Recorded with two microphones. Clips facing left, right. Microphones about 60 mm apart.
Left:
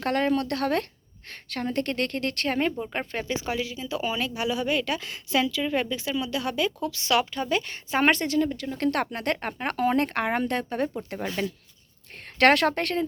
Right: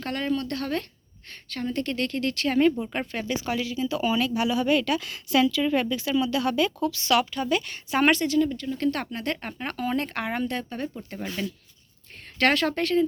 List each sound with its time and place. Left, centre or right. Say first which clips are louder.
0.0 s speech: left 4 dB; left
1.5 s speech: left 1 dB; left
2.8 s speech: right 1 dB; centre
4.9 s a woman's voice: right 3 dB; left
8.1 s speech: right 2 dB; left
8.6 s speech: left 1 dB; left
9.5 s speech: left 4 dB; left
11.4 s speech: left 2 dB; left
12.4 s speech: left 3 dB; left